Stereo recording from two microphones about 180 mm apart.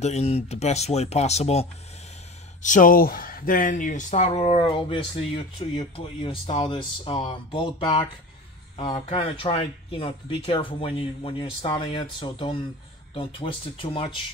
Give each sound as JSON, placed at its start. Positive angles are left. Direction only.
{"t": 0.0, "sound": "speech", "side_deg": 35}
{"t": 2.6, "sound": "speech", "side_deg": 45}